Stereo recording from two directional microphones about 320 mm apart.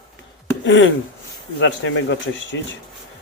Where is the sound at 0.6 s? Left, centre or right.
Left.